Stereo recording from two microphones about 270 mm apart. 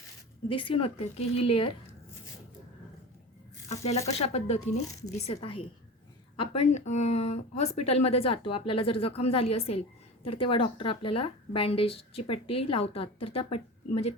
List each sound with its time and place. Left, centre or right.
0.4 s a woman's voice: centre
3.7 s a woman's voice: left